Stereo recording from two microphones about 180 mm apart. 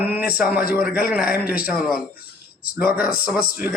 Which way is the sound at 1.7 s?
5° right (ahead or behind).